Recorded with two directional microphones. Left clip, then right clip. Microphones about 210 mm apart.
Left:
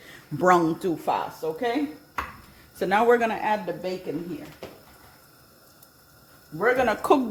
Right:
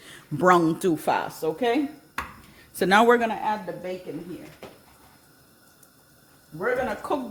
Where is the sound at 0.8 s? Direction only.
40° right (ahead or behind).